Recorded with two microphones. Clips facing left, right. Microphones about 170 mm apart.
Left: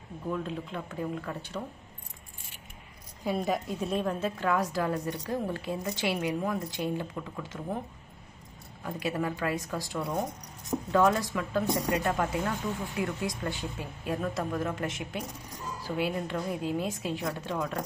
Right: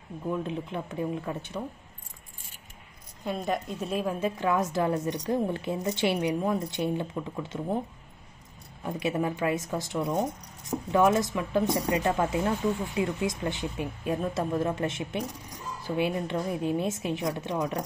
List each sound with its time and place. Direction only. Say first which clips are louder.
0.3 s a woman's voice: right 2 dB; 20° right (ahead or behind)
3.3 s a woman's voice: left 1 dB; centre (ahead or behind)
4.0 s a woman's voice: right 2 dB; 10° right (ahead or behind); by 7.8 s 25° right (ahead or behind)
8.8 s a woman's voice: right 3 dB; 20° right (ahead or behind)